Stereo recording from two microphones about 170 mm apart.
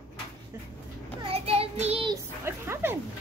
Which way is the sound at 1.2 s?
35° right (ahead or behind).